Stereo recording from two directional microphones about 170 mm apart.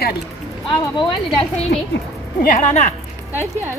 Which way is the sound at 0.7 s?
30° left (ahead or behind).